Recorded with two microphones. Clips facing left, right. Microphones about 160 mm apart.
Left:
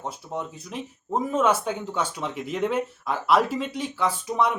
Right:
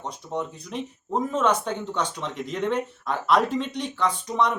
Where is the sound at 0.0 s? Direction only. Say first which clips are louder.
Right 1 dB; 5° left (ahead or behind).